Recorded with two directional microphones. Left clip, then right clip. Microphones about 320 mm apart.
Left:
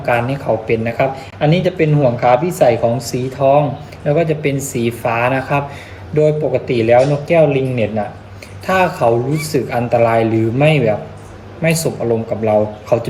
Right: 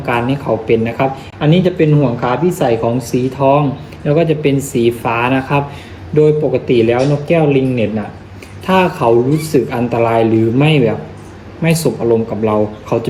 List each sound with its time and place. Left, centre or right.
0.0 s speech: centre